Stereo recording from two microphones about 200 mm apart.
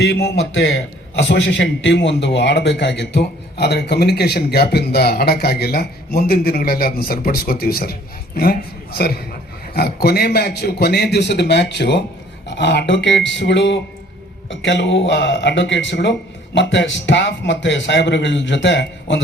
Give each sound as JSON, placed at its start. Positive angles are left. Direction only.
{"t": 0.0, "sound": "a man's voice", "side_deg": 55}